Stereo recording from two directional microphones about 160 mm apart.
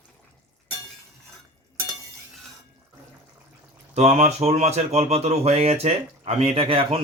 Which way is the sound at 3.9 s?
45° right (ahead or behind).